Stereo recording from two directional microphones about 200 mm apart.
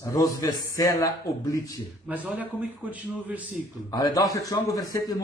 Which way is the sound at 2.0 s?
10° right (ahead or behind).